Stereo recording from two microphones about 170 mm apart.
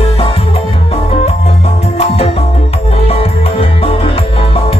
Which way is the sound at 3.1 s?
35° left (ahead or behind).